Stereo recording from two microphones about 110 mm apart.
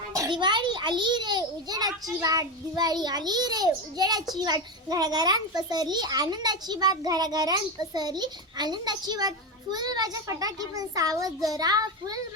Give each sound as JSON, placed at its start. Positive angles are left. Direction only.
{"t": 0.3, "sound": "a child's voice", "side_deg": -45}